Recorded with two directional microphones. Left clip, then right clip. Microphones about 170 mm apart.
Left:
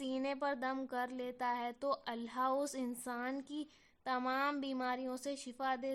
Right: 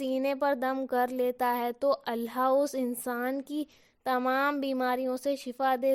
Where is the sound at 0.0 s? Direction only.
40° right (ahead or behind).